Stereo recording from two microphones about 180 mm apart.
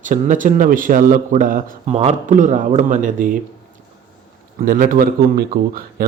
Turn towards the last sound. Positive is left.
turn(degrees=-55)  # may be behind; listen again after turning